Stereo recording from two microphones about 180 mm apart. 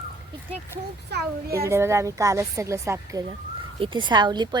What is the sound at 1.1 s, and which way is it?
Speech, 70° right (ahead or behind).